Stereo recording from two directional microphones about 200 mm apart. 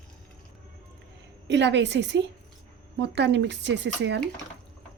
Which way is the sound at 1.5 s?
60° right (ahead or behind).